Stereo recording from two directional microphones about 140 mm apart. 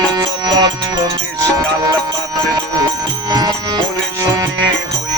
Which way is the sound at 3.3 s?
30° right (ahead or behind).